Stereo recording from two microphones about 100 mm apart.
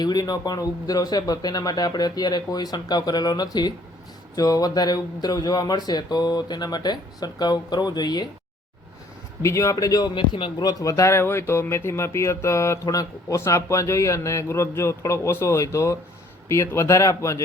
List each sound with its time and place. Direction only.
0.0 s speech: 45° left (ahead or behind)
9.4 s speech: 30° left (ahead or behind)
10.2 s speech: 55° left (ahead or behind); by 17.4 s 30° left (ahead or behind)